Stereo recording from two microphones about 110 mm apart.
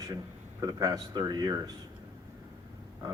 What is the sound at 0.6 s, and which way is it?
A man's voice, 35° right (ahead or behind).